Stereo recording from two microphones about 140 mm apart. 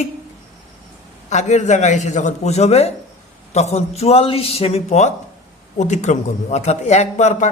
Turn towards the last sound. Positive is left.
turn(degrees=55)  # may be behind; listen again after turning